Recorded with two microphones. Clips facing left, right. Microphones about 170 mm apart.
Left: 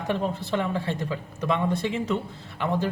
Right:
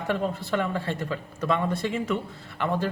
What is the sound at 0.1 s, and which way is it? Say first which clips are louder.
A man's voice: even; 20° left (ahead or behind).